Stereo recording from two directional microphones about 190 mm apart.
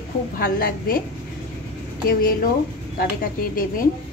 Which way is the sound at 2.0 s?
50° left (ahead or behind).